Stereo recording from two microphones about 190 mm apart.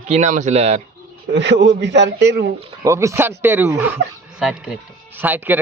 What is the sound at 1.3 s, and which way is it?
A man's voice, 70° right (ahead or behind).